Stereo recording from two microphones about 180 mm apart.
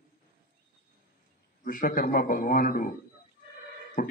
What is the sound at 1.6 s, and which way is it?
A man's voice, 50° left (ahead or behind).